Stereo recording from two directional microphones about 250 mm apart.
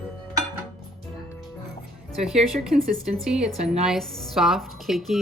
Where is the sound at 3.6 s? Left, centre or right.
Right.